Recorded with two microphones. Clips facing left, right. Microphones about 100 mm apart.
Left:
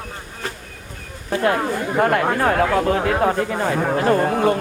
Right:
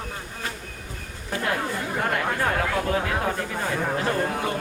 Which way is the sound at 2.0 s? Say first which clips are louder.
Left 8 dB; 55° left (ahead or behind).